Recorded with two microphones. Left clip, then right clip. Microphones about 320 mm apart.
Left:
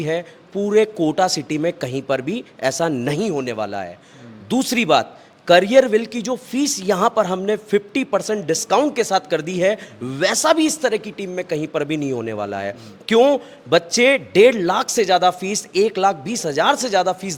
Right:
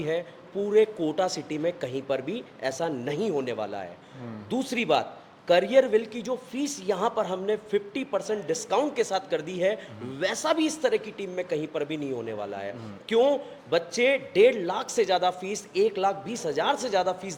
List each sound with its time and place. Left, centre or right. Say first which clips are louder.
0.0 s a man's voice: left 6 dB; left
4.4 s a man's voice: left 8 dB; left